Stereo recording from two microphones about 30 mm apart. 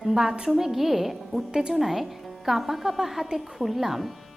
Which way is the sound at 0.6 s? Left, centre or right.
Centre.